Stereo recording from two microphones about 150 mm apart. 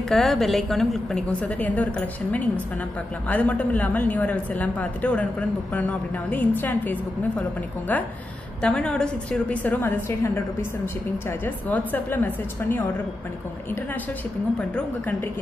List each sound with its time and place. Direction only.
0.1 s a woman's voice: centre (ahead or behind)
14.6 s a woman's voice: 10° left (ahead or behind)